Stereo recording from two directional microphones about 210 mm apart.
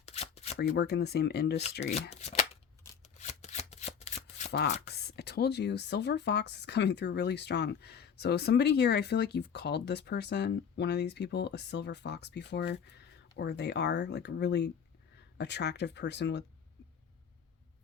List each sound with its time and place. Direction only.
0.0 s shuffling cards: 30° left (ahead or behind)
0.8 s speech: 50° left (ahead or behind)
3.0 s shuffling cards: 35° left (ahead or behind)
4.5 s speech: 50° left (ahead or behind)